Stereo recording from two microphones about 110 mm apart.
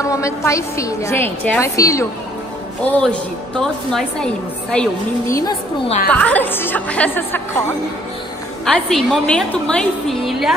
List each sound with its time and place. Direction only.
0.0 s a woman's voice: 30° left (ahead or behind)
1.6 s a woman's voice: 30° left (ahead or behind)
2.8 s a woman's voice: 10° left (ahead or behind)
5.2 s a woman's voice: 30° left (ahead or behind)
6.0 s a woman's voice: 15° left (ahead or behind)
8.6 s a woman's voice: 5° left (ahead or behind)